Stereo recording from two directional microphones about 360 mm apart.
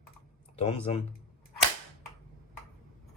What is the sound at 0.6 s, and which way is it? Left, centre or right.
Speech, centre.